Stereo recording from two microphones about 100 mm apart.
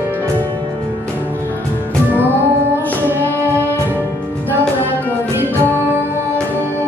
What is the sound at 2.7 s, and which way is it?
Music, 20° right (ahead or behind).